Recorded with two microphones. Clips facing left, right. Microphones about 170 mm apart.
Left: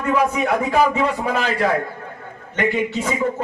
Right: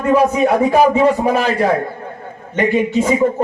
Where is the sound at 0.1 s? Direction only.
40° right (ahead or behind).